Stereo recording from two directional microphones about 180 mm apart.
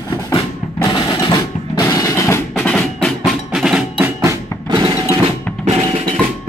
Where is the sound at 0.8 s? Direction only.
25° left (ahead or behind).